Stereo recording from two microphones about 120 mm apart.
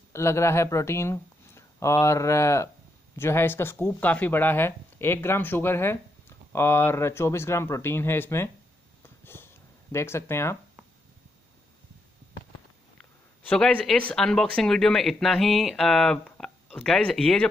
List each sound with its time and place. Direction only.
0.1 s speech: 25° left (ahead or behind)
9.2 s sniff: 20° left (ahead or behind)
9.9 s speech: 20° left (ahead or behind)
13.5 s speech: 10° left (ahead or behind)